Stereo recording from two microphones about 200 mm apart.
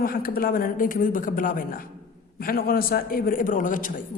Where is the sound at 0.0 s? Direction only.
45° left (ahead or behind).